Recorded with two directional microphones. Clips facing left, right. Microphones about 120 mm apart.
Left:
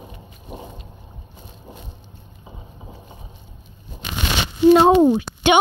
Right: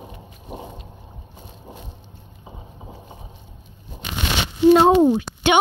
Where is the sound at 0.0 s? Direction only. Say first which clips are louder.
Right 1 dB; 35° right (ahead or behind).